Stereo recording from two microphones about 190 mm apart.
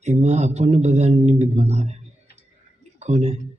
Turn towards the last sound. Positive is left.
turn(degrees=-35)  # may be behind; listen again after turning